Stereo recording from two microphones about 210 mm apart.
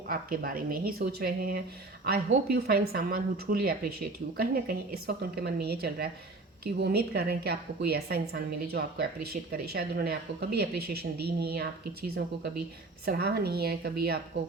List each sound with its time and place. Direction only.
0.1 s a woman's voice: 45° right (ahead or behind)